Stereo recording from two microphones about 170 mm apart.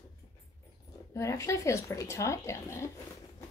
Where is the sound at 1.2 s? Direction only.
20° left (ahead or behind).